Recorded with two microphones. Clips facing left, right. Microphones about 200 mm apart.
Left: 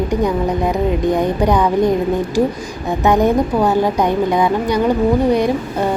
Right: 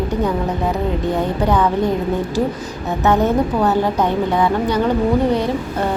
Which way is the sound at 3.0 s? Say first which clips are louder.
Left 2 dB; 15° left (ahead or behind).